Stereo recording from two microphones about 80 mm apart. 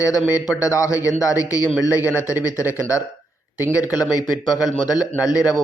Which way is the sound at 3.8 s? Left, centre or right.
Left.